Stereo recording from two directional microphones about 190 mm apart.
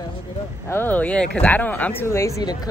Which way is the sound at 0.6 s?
10° left (ahead or behind).